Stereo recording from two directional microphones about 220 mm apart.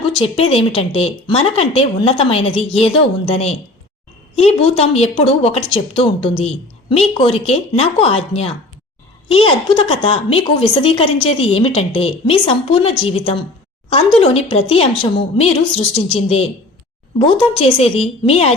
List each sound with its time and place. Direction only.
0.2 s a woman's voice: 25° left (ahead or behind)